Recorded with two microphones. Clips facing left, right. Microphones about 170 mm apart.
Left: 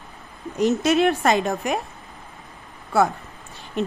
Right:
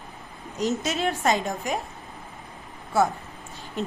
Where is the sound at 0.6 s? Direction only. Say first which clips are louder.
Left 7 dB; 65° left (ahead or behind).